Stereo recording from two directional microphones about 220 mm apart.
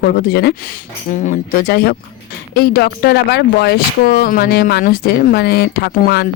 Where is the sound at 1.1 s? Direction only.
35° left (ahead or behind).